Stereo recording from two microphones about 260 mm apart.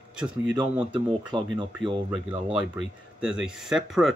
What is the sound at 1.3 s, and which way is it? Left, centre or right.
Speech, centre.